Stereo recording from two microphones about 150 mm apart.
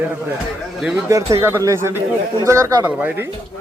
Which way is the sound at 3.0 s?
10° right (ahead or behind).